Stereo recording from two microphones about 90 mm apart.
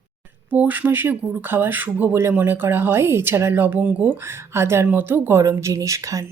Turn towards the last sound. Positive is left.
turn(degrees=-35)  # may be behind; listen again after turning